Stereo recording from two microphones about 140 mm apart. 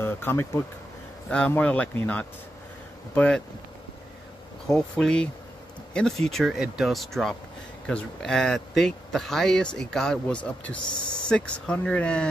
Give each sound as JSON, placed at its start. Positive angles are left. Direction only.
{"t": 0.0, "sound": "speech", "side_deg": 15}
{"t": 4.6, "sound": "speech", "side_deg": 5}